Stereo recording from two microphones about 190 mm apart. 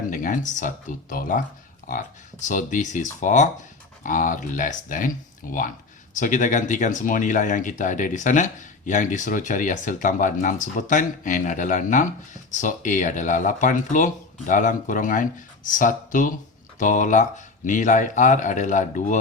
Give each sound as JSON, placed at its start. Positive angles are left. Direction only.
{"t": 0.1, "sound": "speech", "side_deg": 45}